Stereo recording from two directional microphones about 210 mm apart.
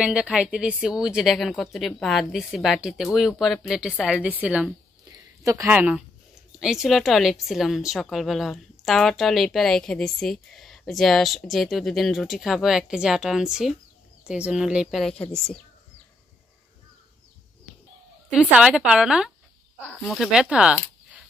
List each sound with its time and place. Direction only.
0.0 s a woman's voice: 5° right (ahead or behind)
18.3 s a woman's voice: 5° right (ahead or behind)